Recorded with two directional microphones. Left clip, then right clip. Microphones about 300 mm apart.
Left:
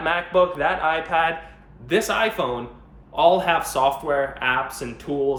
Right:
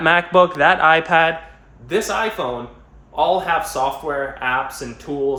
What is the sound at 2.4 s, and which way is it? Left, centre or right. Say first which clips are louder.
Speech: right 1 dB; centre.